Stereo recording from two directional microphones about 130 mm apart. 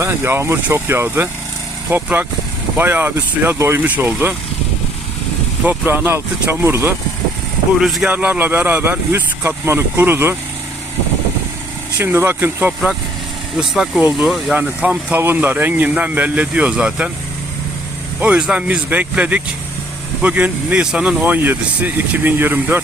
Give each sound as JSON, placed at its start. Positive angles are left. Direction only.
{"t": 0.0, "sound": "speech", "side_deg": -20}
{"t": 5.6, "sound": "speech", "side_deg": -15}
{"t": 7.8, "sound": "speech", "side_deg": 0}
{"t": 8.1, "sound": "speech", "side_deg": -10}
{"t": 11.9, "sound": "speech", "side_deg": -15}
{"t": 13.6, "sound": "speech", "side_deg": -5}
{"t": 18.2, "sound": "speech", "side_deg": -10}